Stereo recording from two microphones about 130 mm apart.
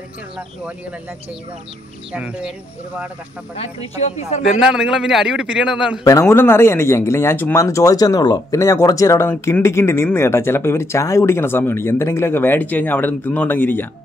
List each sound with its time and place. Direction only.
2.1 s speech: 10° right (ahead or behind)
3.5 s speech: 50° left (ahead or behind)
4.6 s a man's voice: 5° right (ahead or behind)
6.0 s speech: 20° left (ahead or behind)